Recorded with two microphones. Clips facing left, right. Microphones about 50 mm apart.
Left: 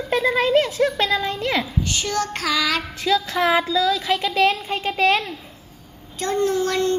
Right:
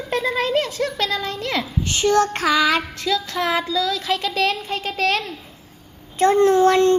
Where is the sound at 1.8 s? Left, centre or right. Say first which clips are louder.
Right 6 dB; right.